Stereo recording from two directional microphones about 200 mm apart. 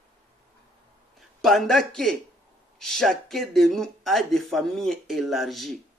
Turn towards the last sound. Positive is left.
turn(degrees=0)  # may be behind; listen again after turning